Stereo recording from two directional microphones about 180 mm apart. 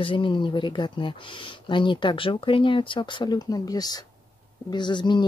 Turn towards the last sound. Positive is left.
turn(degrees=25)  # may be behind; listen again after turning